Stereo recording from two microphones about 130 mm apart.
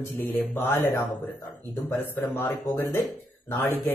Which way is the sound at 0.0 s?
15° left (ahead or behind).